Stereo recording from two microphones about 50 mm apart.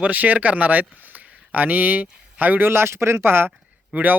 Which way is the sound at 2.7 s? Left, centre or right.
Right.